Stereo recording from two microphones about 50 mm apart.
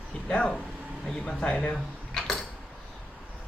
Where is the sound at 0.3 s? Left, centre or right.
Centre.